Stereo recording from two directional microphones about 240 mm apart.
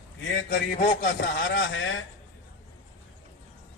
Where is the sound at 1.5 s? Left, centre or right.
Left.